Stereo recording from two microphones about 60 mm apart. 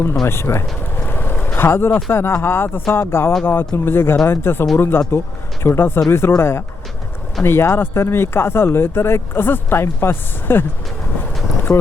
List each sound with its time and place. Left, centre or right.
0.3 s speech: left
1.0 s vehicle: left
1.5 s speech: left
11.7 s speech: left